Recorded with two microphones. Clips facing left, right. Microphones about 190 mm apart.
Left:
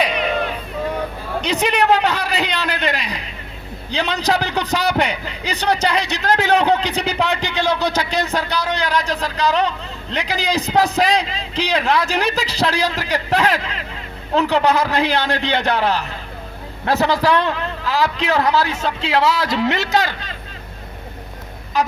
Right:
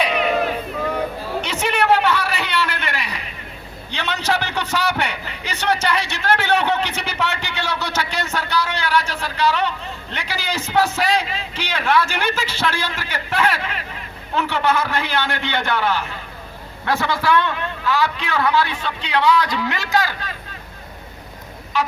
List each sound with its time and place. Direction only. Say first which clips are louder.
0.0 s a sound: even; 35° left (ahead or behind)
1.5 s a man's voice: left 2 dB; 35° left (ahead or behind)
19.5 s speech: left 5 dB; 25° left (ahead or behind)